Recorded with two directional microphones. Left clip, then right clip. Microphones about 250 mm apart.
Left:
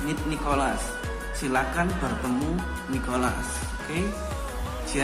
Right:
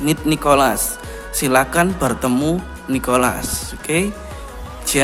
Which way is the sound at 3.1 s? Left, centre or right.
Right.